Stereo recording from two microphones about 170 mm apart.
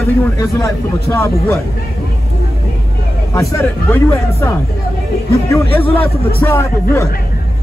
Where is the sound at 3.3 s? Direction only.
15° left (ahead or behind).